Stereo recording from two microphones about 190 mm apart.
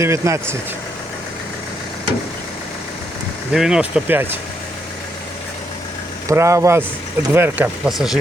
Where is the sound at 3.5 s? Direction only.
5° right (ahead or behind).